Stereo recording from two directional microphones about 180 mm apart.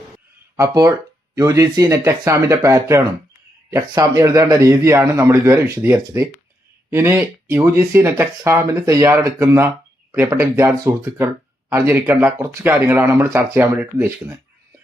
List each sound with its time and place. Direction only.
0.5 s speech: 15° right (ahead or behind)